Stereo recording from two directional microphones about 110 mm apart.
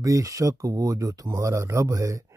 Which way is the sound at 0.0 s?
30° right (ahead or behind).